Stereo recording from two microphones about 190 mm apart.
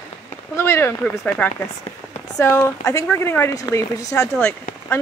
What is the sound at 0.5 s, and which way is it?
Speech, 15° left (ahead or behind).